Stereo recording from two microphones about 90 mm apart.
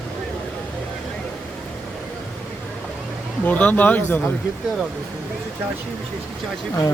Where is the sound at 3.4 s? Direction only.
15° left (ahead or behind).